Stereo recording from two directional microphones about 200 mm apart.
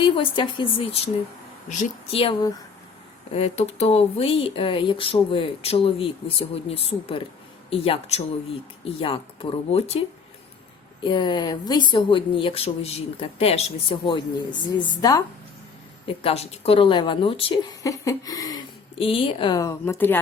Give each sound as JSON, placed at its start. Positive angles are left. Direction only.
{"t": 0.0, "sound": "a woman's voice", "side_deg": 25}
{"t": 11.0, "sound": "a woman's voice", "side_deg": 25}